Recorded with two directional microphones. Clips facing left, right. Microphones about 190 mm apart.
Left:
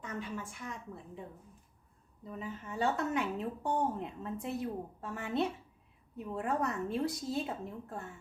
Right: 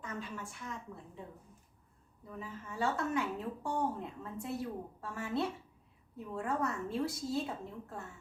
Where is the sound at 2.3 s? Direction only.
20° left (ahead or behind).